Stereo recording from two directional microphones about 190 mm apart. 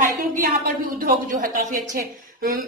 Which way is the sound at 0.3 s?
45° right (ahead or behind).